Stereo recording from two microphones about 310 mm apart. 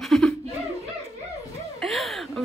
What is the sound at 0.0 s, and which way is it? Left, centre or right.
Laughter, centre.